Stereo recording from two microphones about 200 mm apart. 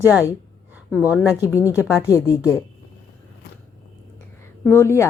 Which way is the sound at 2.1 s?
15° left (ahead or behind).